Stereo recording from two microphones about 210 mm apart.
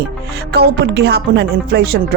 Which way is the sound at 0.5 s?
50° right (ahead or behind).